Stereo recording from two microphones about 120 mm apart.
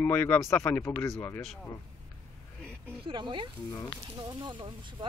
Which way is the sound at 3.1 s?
40° right (ahead or behind).